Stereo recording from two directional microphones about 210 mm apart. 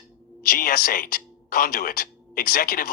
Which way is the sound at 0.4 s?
45° left (ahead or behind).